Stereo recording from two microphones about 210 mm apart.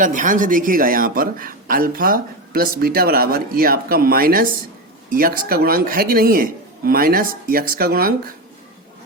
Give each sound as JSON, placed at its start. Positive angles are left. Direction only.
{"t": 0.0, "sound": "speech", "side_deg": -40}